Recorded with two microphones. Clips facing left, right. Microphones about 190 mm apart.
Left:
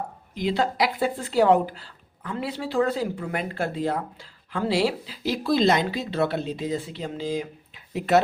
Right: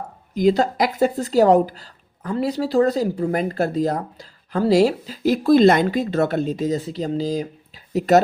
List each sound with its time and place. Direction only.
0.3 s speech: 45° right (ahead or behind)